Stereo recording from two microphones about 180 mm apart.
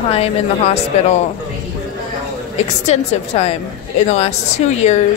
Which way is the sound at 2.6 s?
35° left (ahead or behind).